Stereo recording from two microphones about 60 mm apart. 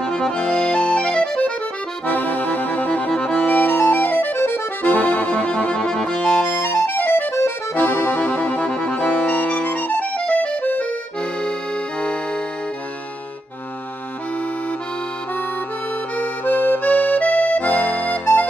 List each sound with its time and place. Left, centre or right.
0.0 s accordion: centre
2.0 s accordion: left
3.6 s accordion: left
6.9 s accordion: left
16.2 s accordion: left